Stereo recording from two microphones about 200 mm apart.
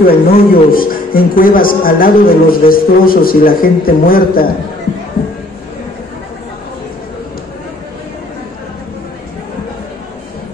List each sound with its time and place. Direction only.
0.0 s a man's voice: 50° left (ahead or behind)